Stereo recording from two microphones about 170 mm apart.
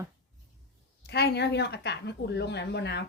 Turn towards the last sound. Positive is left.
turn(degrees=85)